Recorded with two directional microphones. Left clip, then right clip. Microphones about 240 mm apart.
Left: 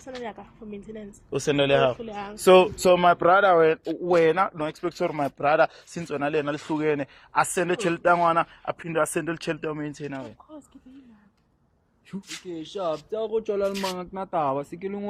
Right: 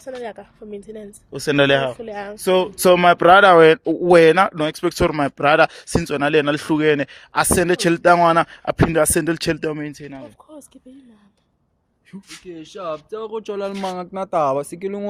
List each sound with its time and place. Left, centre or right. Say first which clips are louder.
0.0 s a woman's voice: right 6 dB; right
2.0 s speech: right 5 dB; right
2.3 s speech: left 2 dB; centre
2.7 s speech: right 6 dB; right
12.1 s speech: left 2 dB; centre
12.5 s speech: right 1 dB; centre
13.1 s speech: left 3 dB; right